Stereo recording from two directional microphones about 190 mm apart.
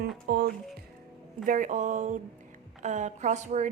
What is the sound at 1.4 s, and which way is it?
A woman's voice, 40° right (ahead or behind).